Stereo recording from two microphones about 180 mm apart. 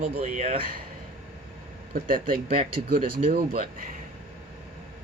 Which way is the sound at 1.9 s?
50° right (ahead or behind).